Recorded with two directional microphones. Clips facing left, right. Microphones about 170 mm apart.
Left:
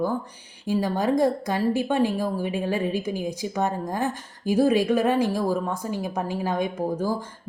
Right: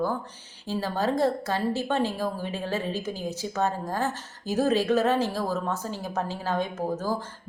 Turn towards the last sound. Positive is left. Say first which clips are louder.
# left 3 dB
turn(degrees=10)  # may be behind; listen again after turning